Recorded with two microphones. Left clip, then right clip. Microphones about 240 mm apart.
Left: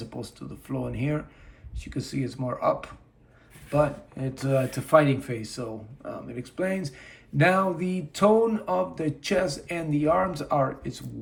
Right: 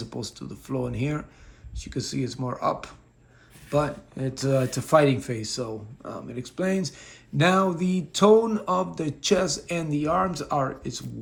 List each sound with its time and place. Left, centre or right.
0.1 s speech: centre